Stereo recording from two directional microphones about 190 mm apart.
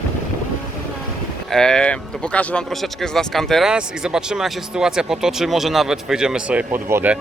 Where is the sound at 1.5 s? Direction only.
5° left (ahead or behind).